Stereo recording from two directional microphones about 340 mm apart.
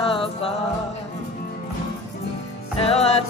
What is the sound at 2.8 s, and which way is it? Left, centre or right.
Music, centre.